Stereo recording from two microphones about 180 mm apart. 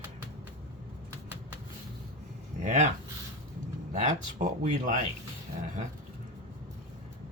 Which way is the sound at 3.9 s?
45° right (ahead or behind).